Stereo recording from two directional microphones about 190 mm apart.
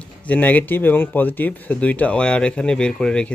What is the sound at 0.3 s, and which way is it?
Speech, 10° left (ahead or behind).